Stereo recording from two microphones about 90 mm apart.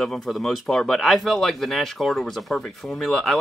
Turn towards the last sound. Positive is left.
turn(degrees=5)  # may be behind; listen again after turning